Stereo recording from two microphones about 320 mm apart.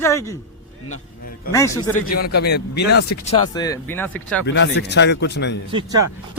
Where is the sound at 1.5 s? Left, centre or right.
Centre.